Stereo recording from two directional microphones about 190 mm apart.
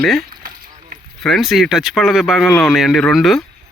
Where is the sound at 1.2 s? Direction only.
Centre (ahead or behind).